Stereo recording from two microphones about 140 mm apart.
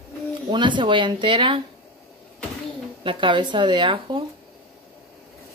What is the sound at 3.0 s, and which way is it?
Speech, 35° right (ahead or behind).